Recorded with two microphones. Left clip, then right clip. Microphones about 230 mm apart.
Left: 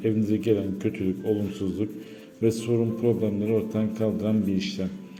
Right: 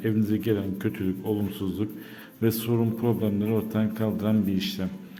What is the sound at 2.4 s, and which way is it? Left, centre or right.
A man's voice, right.